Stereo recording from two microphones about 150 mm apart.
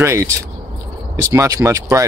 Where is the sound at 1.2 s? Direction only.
20° right (ahead or behind).